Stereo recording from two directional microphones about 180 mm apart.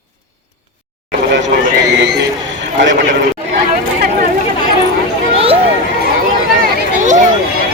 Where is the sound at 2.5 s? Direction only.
85° right.